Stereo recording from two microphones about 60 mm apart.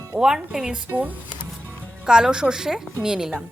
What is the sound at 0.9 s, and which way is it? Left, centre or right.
Speech, right.